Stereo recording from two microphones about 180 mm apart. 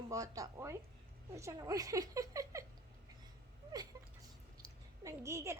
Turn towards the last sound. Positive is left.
turn(degrees=-15)  # may be behind; listen again after turning